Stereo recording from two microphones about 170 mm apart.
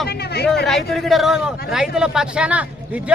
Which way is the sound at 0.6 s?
Centre (ahead or behind).